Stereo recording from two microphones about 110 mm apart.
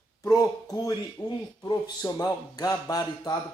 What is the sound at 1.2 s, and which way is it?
Speech, 20° left (ahead or behind).